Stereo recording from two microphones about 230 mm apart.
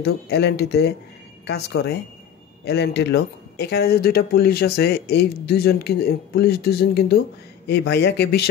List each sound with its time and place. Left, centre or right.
0.0 s speech: left